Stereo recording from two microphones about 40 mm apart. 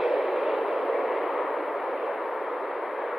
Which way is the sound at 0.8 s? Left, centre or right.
Right.